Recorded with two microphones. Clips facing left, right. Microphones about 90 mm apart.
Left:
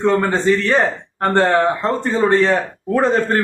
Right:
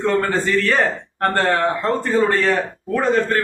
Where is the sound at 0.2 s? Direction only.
20° left (ahead or behind).